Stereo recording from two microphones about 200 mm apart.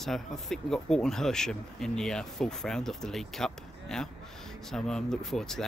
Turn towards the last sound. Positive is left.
turn(degrees=0)  # may be behind; listen again after turning